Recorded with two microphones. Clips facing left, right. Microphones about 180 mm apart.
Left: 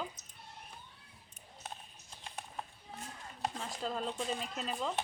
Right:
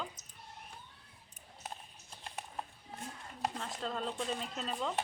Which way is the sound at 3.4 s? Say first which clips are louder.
Even; centre (ahead or behind).